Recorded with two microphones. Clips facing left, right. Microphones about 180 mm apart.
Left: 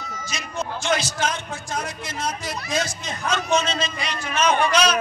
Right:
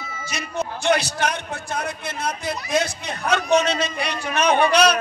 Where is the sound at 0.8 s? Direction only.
65° right (ahead or behind).